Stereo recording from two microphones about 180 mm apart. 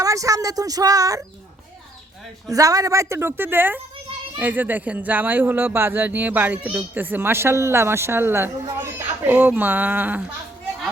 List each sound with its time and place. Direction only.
0.0 s speech: 20° right (ahead or behind)
2.5 s speech: 20° right (ahead or behind)